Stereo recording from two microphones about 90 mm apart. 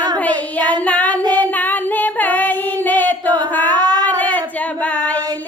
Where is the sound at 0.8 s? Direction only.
15° left (ahead or behind).